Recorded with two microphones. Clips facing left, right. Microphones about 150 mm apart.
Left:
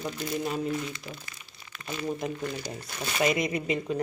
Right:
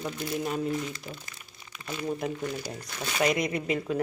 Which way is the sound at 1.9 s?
Centre (ahead or behind).